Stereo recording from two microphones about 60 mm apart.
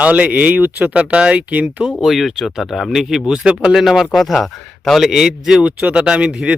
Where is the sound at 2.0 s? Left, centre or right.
Centre.